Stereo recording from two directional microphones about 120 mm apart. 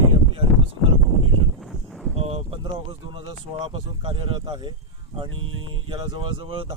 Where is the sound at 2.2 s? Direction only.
55° right (ahead or behind).